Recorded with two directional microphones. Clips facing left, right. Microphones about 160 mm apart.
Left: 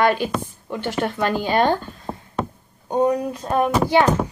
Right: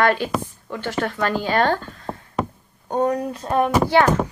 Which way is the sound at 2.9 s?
10° left (ahead or behind).